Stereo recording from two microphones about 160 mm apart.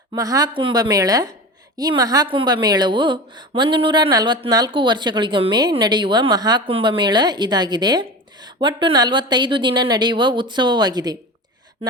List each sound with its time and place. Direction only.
0.1 s speech: 20° right (ahead or behind)